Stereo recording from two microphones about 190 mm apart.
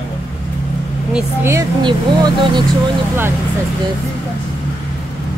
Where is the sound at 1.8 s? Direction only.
25° right (ahead or behind).